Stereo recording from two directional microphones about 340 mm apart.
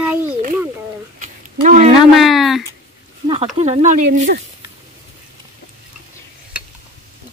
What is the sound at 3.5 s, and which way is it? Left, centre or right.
Speech, centre.